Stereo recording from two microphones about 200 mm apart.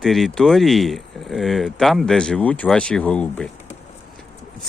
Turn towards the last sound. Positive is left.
turn(degrees=5)  # may be behind; listen again after turning